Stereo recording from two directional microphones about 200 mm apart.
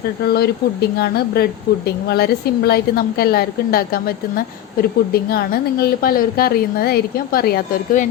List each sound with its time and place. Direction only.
0.3 s a woman's voice: 55° left (ahead or behind)